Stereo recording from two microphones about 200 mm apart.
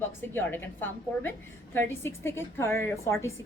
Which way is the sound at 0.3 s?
10° left (ahead or behind).